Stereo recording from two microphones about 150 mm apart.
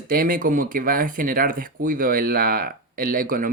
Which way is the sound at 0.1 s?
70° right (ahead or behind).